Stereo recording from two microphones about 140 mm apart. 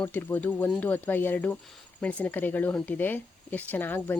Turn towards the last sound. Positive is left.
turn(degrees=15)  # may be behind; listen again after turning